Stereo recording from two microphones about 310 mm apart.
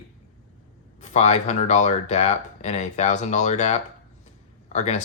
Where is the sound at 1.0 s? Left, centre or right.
Left.